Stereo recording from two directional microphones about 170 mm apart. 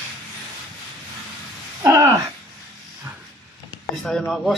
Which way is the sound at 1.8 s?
20° right (ahead or behind).